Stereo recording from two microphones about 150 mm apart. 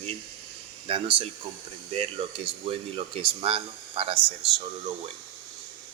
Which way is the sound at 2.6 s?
40° right (ahead or behind).